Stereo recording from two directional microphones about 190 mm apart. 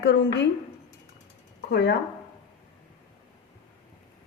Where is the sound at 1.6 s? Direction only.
60° left (ahead or behind).